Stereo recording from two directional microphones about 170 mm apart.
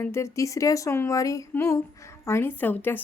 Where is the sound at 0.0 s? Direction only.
15° left (ahead or behind).